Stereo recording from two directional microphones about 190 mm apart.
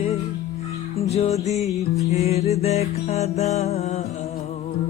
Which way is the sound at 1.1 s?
35° left (ahead or behind).